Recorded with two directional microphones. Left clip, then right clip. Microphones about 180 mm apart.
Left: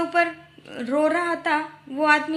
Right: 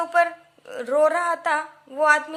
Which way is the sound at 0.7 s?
50° right (ahead or behind).